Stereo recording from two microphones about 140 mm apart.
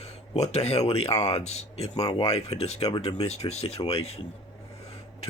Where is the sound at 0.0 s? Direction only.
50° left (ahead or behind).